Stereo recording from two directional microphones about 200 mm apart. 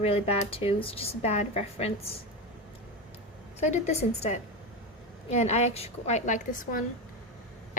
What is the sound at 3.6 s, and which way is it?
A woman's voice, 35° left (ahead or behind).